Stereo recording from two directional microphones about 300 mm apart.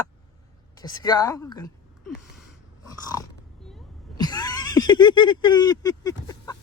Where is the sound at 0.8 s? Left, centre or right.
Centre.